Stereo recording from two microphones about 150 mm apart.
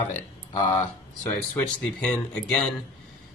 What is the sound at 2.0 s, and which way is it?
Speech, 5° left (ahead or behind).